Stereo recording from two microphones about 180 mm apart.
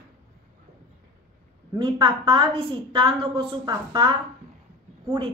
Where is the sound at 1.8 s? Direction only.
25° right (ahead or behind).